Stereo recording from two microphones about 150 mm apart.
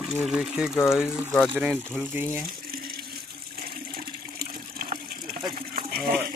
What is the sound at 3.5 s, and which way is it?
Toilet flush, 90° right.